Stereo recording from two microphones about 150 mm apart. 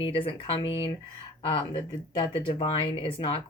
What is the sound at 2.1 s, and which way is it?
Speech, 35° left (ahead or behind).